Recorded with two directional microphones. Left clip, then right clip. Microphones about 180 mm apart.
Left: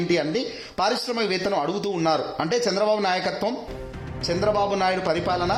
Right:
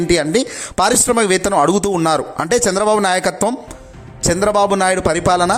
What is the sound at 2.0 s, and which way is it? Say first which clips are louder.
Speech: right 6 dB; 40° right (ahead or behind).